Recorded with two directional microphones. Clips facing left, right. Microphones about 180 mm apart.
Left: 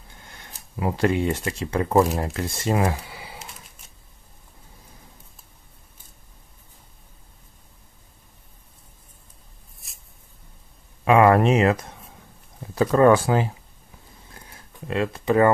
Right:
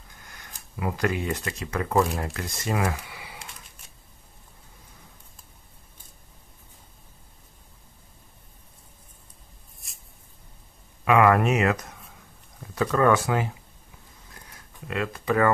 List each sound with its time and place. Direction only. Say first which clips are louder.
0.2 s speech: left 2 dB; 30° left (ahead or behind)
11.1 s speech: left 3 dB; 30° left (ahead or behind)
14.3 s a sound: left 2 dB; 25° left (ahead or behind)